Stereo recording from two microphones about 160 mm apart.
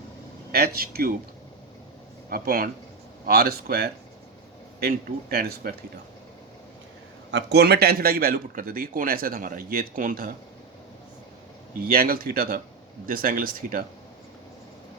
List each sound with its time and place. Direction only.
0.5 s speech: 75° right (ahead or behind)
2.3 s a man's voice: 65° right (ahead or behind)
7.5 s a man's voice: 90° right; by 10.3 s 60° right (ahead or behind)
11.9 s a man's voice: 65° right (ahead or behind)